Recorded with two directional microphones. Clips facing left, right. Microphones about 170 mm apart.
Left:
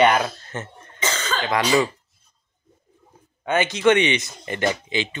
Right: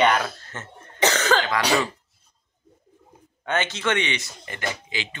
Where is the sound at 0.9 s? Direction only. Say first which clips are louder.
Right 6 dB; 70° right (ahead or behind).